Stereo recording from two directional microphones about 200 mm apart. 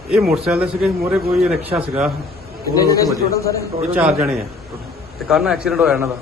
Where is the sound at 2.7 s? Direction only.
20° left (ahead or behind).